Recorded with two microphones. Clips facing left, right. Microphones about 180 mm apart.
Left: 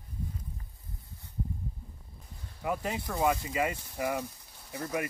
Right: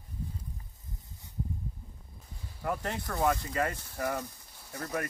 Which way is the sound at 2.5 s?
5° left (ahead or behind).